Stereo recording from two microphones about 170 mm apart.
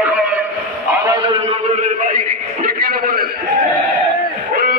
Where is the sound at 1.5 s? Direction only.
50° right (ahead or behind).